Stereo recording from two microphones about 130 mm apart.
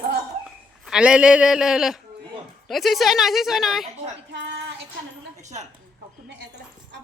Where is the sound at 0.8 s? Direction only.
5° right (ahead or behind).